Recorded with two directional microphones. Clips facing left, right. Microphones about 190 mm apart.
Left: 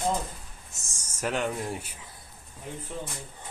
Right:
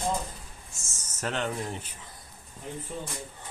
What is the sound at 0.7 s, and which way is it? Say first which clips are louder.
Speech: even; 10° left (ahead or behind).